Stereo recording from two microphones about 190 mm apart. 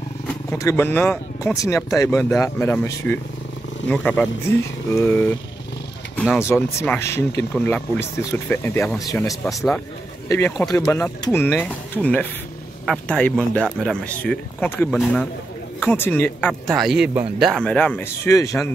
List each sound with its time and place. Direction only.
0.3 s speech: 15° left (ahead or behind)
9.4 s speech: centre (ahead or behind)
10.2 s speech: 15° left (ahead or behind)